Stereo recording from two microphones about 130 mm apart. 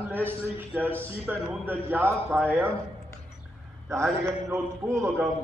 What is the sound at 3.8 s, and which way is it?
A man's voice, 20° right (ahead or behind).